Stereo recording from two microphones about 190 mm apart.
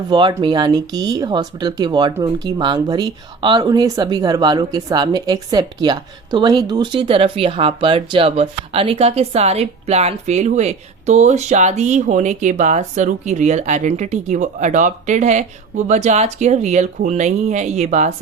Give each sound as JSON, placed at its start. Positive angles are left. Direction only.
{"t": 0.1, "sound": "speech", "side_deg": -25}